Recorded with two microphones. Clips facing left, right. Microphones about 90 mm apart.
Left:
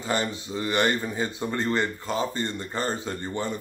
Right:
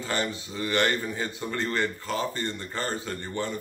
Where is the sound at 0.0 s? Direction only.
20° left (ahead or behind).